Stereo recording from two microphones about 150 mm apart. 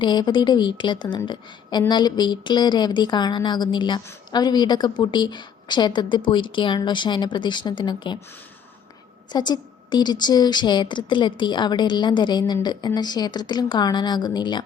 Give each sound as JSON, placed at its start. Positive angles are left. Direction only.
{"t": 0.0, "sound": "a woman's voice", "side_deg": 30}
{"t": 9.3, "sound": "a woman's voice", "side_deg": 30}